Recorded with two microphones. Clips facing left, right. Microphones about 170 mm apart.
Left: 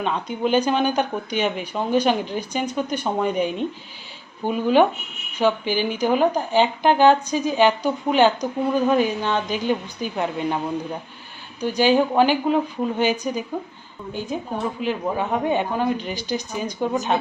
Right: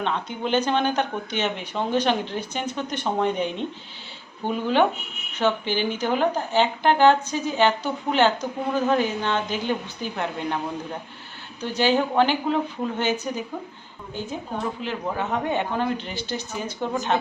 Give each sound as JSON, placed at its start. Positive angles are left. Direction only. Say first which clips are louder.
{"t": 0.0, "sound": "speech", "louder": "left 3 dB", "side_deg": 10}
{"t": 11.6, "sound": "speech", "louder": "left 4 dB", "side_deg": 15}
{"t": 14.8, "sound": "speech", "louder": "left 6 dB", "side_deg": 15}